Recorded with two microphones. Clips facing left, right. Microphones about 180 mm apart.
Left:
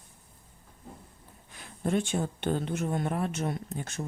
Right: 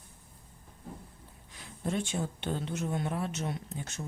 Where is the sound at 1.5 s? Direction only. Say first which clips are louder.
Left 5 dB; 55° left (ahead or behind).